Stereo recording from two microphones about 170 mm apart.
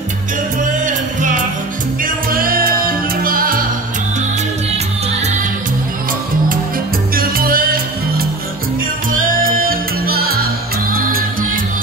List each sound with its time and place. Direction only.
2.0 s music: 55° right (ahead or behind)
7.2 s music: 60° right (ahead or behind)